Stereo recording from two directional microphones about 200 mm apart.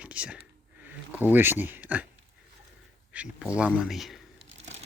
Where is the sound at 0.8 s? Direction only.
10° right (ahead or behind).